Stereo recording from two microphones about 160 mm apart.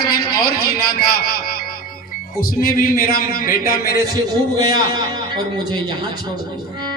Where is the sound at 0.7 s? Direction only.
70° left (ahead or behind).